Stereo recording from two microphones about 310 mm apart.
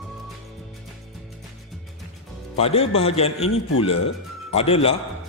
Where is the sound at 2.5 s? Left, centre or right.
Centre.